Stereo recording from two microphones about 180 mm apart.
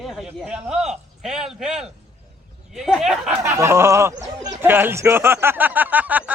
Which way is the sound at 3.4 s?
15° right (ahead or behind).